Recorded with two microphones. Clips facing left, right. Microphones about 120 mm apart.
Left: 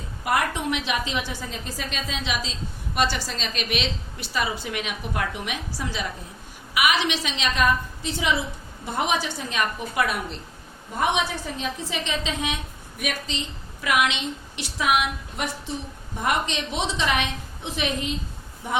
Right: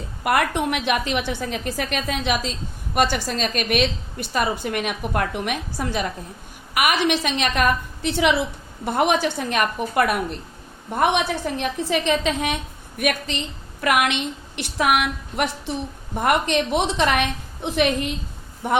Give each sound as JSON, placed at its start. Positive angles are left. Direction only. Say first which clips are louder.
{"t": 0.3, "sound": "a woman's voice", "louder": "right 4 dB", "side_deg": -60}